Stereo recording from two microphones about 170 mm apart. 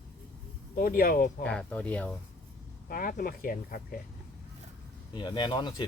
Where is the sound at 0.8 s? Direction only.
60° left (ahead or behind).